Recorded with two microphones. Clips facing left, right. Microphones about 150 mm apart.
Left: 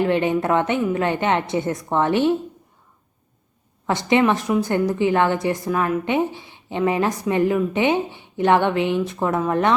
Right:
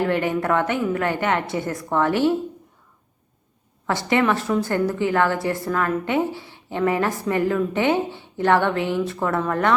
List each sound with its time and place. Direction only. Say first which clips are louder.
0.0 s a woman's voice: left 2 dB; 20° left (ahead or behind)
3.8 s a woman's voice: left 2 dB; 20° left (ahead or behind)